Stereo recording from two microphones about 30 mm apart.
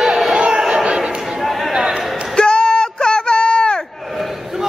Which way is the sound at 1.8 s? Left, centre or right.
Right.